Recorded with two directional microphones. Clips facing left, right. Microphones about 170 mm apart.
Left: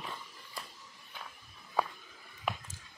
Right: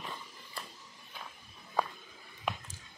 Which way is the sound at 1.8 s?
5° left (ahead or behind).